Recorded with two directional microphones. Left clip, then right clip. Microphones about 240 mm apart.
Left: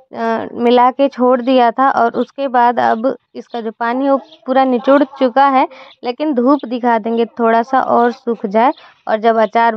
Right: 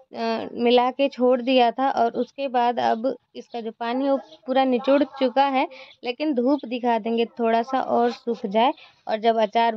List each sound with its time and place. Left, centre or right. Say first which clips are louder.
0.1 s speech: left 9 dB; centre